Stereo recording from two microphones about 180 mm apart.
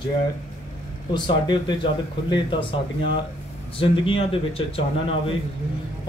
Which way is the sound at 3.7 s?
30° left (ahead or behind).